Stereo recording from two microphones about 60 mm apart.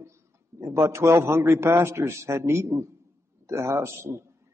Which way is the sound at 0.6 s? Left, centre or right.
Right.